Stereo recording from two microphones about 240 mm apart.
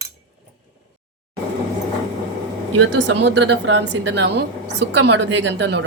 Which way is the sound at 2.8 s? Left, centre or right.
Right.